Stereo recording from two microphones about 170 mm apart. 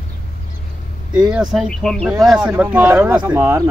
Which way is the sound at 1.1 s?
5° right (ahead or behind).